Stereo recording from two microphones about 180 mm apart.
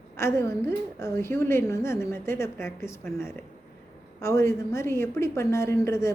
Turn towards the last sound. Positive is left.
turn(degrees=15)  # may be behind; listen again after turning